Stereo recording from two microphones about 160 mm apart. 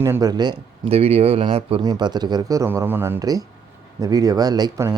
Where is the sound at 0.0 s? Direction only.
20° right (ahead or behind).